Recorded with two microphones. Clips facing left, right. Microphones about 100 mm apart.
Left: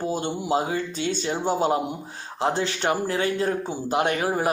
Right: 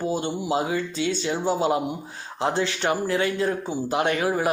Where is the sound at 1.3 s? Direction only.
20° left (ahead or behind).